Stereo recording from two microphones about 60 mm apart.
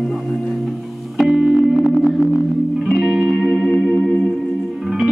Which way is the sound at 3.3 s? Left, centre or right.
Centre.